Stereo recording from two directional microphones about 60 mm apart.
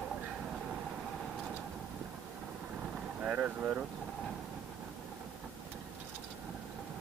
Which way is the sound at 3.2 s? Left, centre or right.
Centre.